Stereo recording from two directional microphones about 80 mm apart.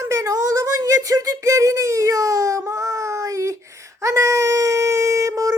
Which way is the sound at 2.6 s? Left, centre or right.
Right.